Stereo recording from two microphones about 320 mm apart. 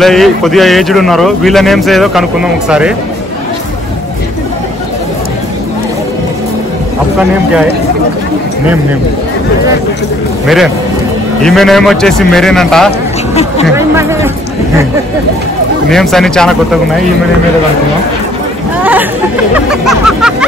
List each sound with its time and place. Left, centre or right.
0.0 s speech: centre
10.4 s speech: centre
13.3 s speech: centre
13.7 s a man's voice: centre
15.9 s speech: centre
19.5 s music: centre